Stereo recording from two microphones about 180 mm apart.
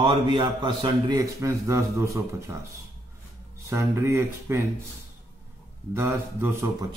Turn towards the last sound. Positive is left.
turn(degrees=-15)  # may be behind; listen again after turning